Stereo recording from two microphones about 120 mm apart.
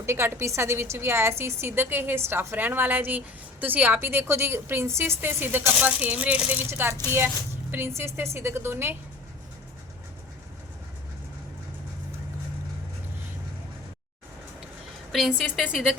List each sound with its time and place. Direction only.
0.0 s a woman's voice: 20° right (ahead or behind)
15.1 s a woman's voice: centre (ahead or behind)